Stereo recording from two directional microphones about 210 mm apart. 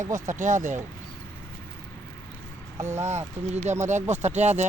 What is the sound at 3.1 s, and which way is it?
Speech, 35° right (ahead or behind).